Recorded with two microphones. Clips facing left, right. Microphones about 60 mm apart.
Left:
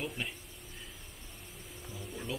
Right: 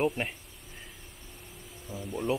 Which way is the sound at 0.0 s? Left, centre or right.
Right.